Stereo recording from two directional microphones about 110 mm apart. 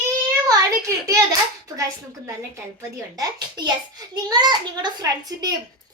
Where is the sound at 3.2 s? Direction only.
35° right (ahead or behind).